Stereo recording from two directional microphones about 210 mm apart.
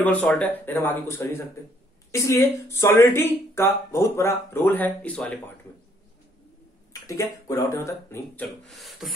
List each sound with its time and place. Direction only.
0.0 s speech: 5° left (ahead or behind)
6.9 s speech: 15° left (ahead or behind)
8.6 s speech: centre (ahead or behind)